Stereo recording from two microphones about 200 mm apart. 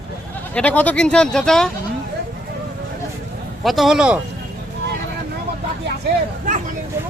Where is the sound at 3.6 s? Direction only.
Centre (ahead or behind).